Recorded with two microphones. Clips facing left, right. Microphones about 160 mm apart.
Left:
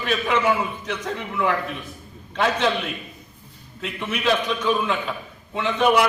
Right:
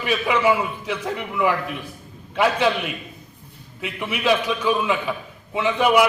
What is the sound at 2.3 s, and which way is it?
A man's voice, 10° right (ahead or behind).